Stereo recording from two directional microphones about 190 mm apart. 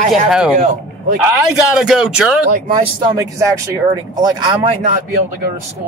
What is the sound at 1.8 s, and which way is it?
Speech, 5° right (ahead or behind).